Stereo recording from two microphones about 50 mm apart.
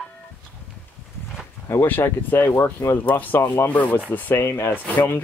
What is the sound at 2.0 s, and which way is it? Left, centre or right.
Speech, left.